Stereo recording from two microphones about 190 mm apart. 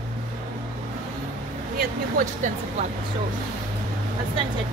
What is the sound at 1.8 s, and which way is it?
Speech, 45° right (ahead or behind).